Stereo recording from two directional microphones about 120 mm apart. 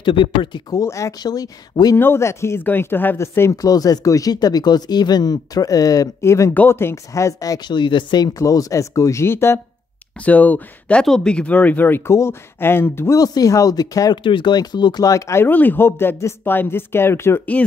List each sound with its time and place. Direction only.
0.0 s speech: 45° left (ahead or behind)
2.0 s speech: 20° left (ahead or behind)